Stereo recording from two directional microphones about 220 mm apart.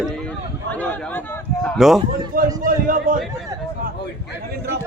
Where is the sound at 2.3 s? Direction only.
40° right (ahead or behind).